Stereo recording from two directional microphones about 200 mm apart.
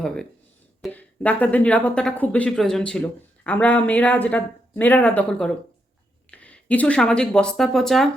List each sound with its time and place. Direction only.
0.8 s speech: 10° left (ahead or behind)